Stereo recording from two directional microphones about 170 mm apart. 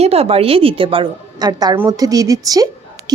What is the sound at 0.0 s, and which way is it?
A woman's voice, 35° right (ahead or behind).